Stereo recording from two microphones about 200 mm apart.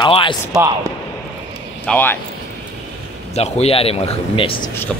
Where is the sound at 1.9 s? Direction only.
10° left (ahead or behind).